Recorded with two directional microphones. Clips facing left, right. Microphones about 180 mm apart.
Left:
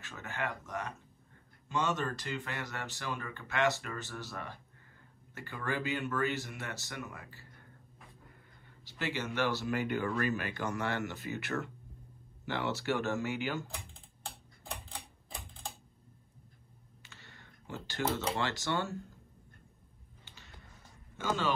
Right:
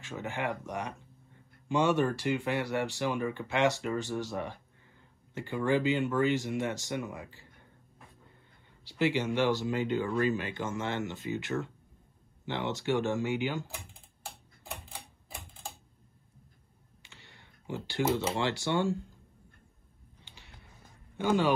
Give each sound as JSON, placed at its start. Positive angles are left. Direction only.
{"t": 0.0, "sound": "speech", "side_deg": -15}
{"t": 8.8, "sound": "speech", "side_deg": -15}
{"t": 13.9, "sound": "typing", "side_deg": 0}
{"t": 17.0, "sound": "a sound", "side_deg": -15}
{"t": 18.1, "sound": "speech", "side_deg": -15}
{"t": 20.2, "sound": "music", "side_deg": -15}
{"t": 21.2, "sound": "speech", "side_deg": -15}